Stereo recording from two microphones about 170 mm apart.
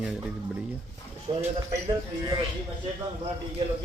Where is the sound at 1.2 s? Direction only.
35° right (ahead or behind).